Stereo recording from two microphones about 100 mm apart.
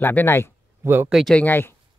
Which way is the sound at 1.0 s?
5° right (ahead or behind).